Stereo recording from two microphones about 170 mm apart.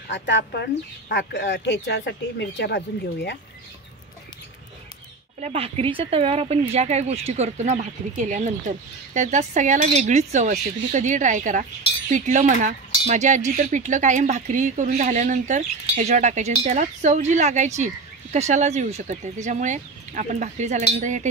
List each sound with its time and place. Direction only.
0.1 s speech: 90° left
5.4 s speech: 35° right (ahead or behind)